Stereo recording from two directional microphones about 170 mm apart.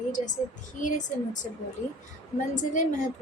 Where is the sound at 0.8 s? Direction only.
50° left (ahead or behind).